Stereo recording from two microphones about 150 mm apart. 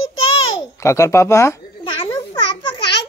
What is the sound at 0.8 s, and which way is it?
Speech, 20° left (ahead or behind).